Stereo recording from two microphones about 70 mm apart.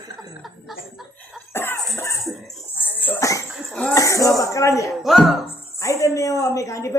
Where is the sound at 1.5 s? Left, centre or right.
Left.